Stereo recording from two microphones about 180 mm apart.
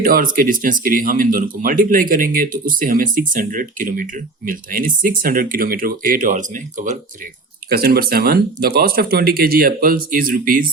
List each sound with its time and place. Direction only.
0.0 s speech: 55° right (ahead or behind)
7.7 s speech: 60° right (ahead or behind)